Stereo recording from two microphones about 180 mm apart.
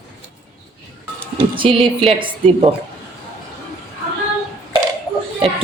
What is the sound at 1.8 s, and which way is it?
Speech, 30° right (ahead or behind).